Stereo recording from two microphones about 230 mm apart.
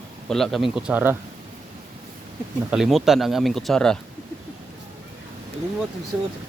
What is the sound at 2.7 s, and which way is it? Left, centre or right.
Speech, centre.